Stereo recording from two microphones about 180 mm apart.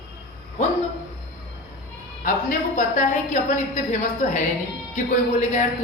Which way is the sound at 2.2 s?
50° left (ahead or behind).